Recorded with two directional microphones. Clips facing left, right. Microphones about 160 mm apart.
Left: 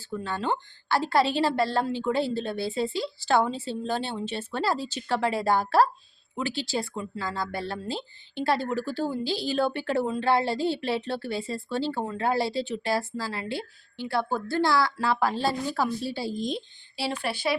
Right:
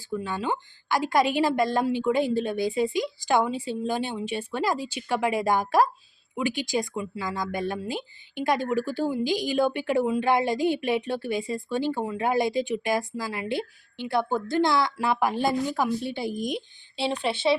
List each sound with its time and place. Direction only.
0.0 s speech: 10° right (ahead or behind)